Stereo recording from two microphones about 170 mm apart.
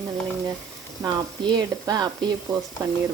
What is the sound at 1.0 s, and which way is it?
Speech, 25° right (ahead or behind).